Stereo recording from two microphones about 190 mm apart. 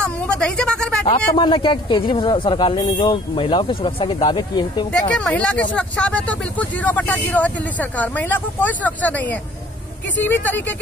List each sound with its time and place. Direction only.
0.0 s a woman's voice: 5° left (ahead or behind)
1.0 s speech: 30° left (ahead or behind)
4.9 s speech: 5° left (ahead or behind)